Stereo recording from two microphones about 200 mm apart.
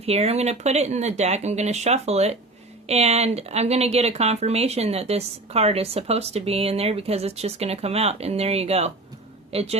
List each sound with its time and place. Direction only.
0.0 s speech: 30° right (ahead or behind)